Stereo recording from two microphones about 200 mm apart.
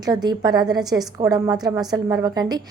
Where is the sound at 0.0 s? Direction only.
20° right (ahead or behind).